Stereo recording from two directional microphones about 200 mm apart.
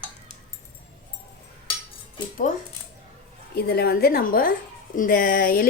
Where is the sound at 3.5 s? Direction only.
55° left (ahead or behind).